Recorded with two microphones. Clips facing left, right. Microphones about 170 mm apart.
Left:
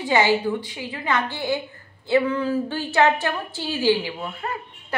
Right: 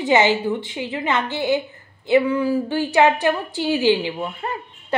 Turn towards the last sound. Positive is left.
turn(degrees=-20)  # may be behind; listen again after turning